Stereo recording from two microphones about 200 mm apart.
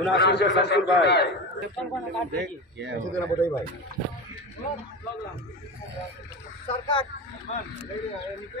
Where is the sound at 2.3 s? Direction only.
60° right (ahead or behind).